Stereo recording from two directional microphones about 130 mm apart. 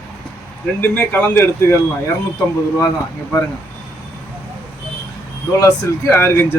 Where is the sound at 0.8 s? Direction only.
15° left (ahead or behind).